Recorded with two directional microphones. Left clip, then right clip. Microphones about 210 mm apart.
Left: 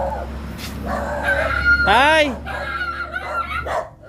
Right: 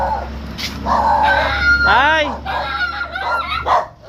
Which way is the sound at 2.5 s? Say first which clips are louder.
Right 5 dB; 20° left (ahead or behind).